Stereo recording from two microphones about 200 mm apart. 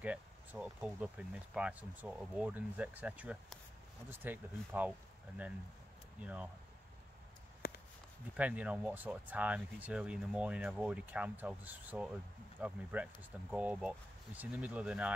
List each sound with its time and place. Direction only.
0.0 s speech: 5° right (ahead or behind)
6.2 s speech: 5° right (ahead or behind)
7.6 s a sound: 45° left (ahead or behind)
8.4 s speech: 5° right (ahead or behind)